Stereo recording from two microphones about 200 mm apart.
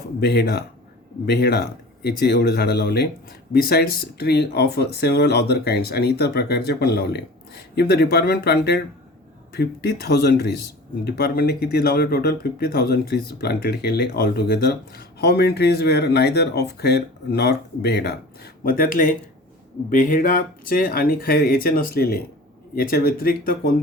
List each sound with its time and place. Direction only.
0.2 s speech: 55° left (ahead or behind)
18.6 s speech: 45° left (ahead or behind)